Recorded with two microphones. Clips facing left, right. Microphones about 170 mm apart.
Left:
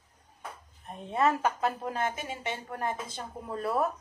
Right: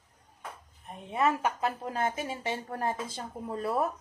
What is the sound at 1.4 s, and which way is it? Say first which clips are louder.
Speech: left 1 dB; 25° left (ahead or behind).